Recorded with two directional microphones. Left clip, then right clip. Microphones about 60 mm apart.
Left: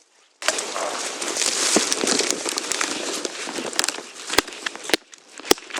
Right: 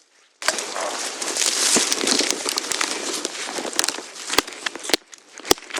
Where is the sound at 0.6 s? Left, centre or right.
Right.